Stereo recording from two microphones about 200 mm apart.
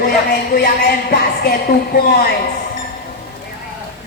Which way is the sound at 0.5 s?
50° left (ahead or behind).